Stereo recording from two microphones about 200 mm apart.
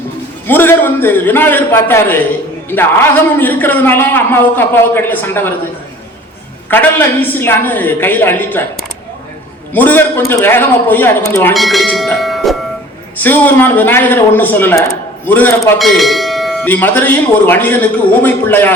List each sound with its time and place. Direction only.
0.4 s a man's voice: 10° left (ahead or behind)
6.7 s a man's voice: 10° left (ahead or behind)
9.7 s a man's voice: 10° left (ahead or behind)
11.5 s a man's voice: centre (ahead or behind)